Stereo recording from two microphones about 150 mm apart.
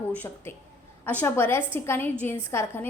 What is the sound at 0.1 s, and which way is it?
A woman's voice, 10° left (ahead or behind).